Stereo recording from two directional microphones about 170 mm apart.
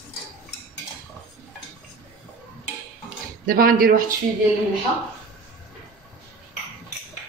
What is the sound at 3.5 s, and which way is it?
Speech, 55° right (ahead or behind).